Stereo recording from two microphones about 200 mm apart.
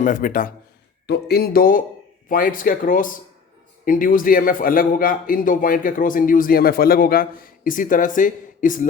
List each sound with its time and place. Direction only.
0.0 s a man's voice: 40° left (ahead or behind)
1.0 s a man's voice: 55° left (ahead or behind)